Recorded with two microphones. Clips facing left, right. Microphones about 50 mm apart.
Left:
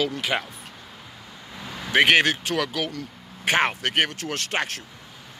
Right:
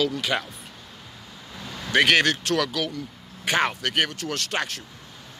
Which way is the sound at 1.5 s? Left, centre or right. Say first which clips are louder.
Left 1 dB; centre.